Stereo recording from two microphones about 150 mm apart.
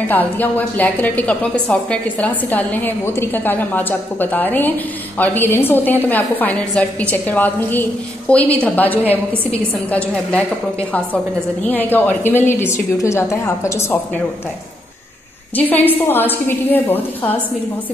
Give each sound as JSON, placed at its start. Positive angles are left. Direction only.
{"t": 0.0, "sound": "a woman's voice", "side_deg": 10}
{"t": 15.5, "sound": "a woman's voice", "side_deg": 10}